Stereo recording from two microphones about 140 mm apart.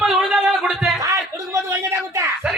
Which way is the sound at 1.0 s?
25° right (ahead or behind).